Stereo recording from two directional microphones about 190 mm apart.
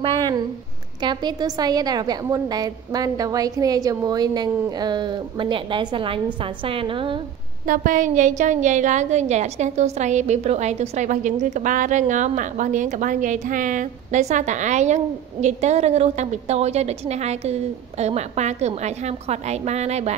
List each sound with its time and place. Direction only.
0.0 s a woman's voice: 25° right (ahead or behind)
7.6 s a woman's voice: 45° right (ahead or behind)